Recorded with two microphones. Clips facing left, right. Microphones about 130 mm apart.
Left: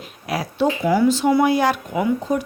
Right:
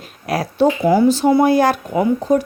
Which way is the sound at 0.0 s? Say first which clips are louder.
Right 4 dB; 40° right (ahead or behind).